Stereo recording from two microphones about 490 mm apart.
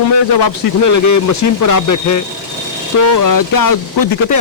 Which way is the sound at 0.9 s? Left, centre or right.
Left.